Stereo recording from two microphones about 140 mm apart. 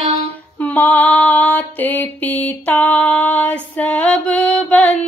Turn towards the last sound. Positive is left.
turn(degrees=10)  # may be behind; listen again after turning